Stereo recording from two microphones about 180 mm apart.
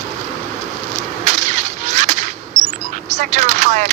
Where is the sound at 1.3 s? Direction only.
40° right (ahead or behind).